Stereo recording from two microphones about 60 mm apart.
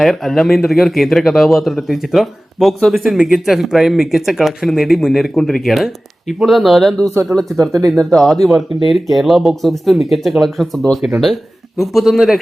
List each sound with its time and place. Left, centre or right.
0.0 s a man's voice: centre
7.3 s speech: right
7.9 s a man's voice: centre
11.0 s speech: centre
11.8 s a man's voice: centre